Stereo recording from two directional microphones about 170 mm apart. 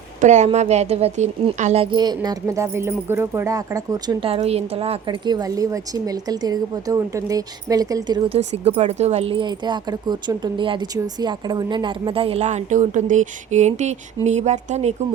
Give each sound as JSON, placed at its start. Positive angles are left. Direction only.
{"t": 0.2, "sound": "speech", "side_deg": -45}
{"t": 8.4, "sound": "speech", "side_deg": -40}